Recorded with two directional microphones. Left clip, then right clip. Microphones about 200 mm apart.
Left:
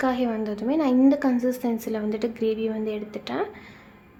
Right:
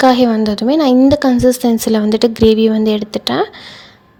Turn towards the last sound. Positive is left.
turn(degrees=-40)  # may be behind; listen again after turning